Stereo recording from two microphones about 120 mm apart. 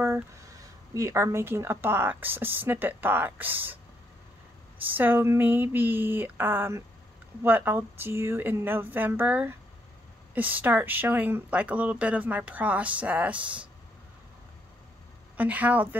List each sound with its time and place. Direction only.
0.9 s speech: 25° right (ahead or behind)
4.8 s speech: 15° right (ahead or behind)
15.3 s speech: 10° right (ahead or behind)